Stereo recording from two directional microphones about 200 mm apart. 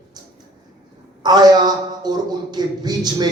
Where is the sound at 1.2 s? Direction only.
20° right (ahead or behind).